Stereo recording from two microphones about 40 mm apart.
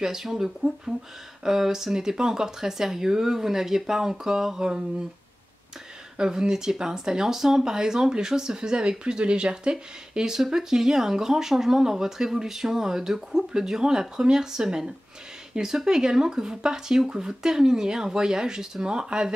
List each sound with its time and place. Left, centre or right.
0.0 s speech: centre
6.1 s speech: centre